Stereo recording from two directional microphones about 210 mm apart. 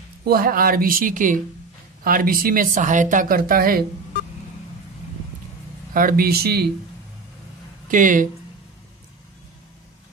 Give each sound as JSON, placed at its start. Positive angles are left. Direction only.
{"t": 0.2, "sound": "speech", "side_deg": -45}
{"t": 5.9, "sound": "speech", "side_deg": -45}
{"t": 7.9, "sound": "speech", "side_deg": -40}